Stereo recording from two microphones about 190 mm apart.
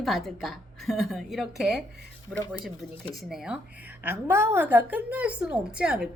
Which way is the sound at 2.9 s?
30° left (ahead or behind).